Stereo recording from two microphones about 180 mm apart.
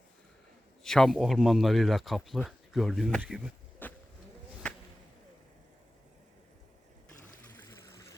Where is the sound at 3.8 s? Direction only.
10° left (ahead or behind).